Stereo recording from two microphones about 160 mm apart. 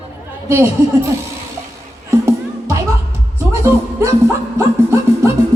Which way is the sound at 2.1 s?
15° right (ahead or behind).